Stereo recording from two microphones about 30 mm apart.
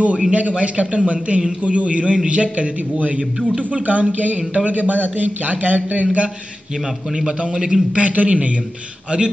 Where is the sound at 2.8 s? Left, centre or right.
Right.